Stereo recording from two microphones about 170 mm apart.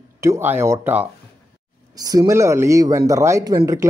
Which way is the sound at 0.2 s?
15° right (ahead or behind).